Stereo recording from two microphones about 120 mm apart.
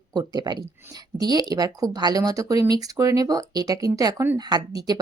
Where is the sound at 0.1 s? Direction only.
35° right (ahead or behind).